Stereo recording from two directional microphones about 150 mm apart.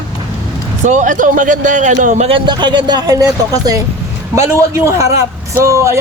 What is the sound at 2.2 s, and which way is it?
Speech, 35° right (ahead or behind).